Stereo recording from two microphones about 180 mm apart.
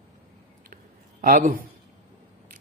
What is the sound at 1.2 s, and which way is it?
Speech, 50° right (ahead or behind).